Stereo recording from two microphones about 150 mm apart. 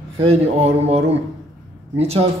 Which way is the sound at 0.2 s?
40° right (ahead or behind).